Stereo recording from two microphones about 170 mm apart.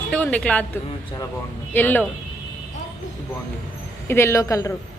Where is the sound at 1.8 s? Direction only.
10° left (ahead or behind).